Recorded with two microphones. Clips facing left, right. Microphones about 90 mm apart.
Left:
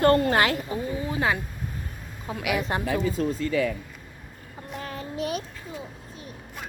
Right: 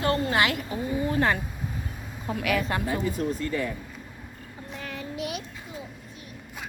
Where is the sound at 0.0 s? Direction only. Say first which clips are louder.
Left 4 dB; 45° left (ahead or behind).